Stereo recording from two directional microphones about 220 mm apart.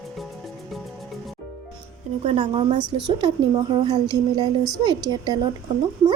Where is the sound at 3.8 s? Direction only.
20° right (ahead or behind).